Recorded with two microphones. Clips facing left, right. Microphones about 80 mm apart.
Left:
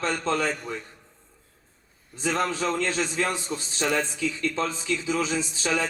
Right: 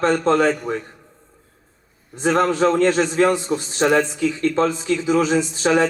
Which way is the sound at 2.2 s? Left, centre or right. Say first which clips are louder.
Right 9 dB; right.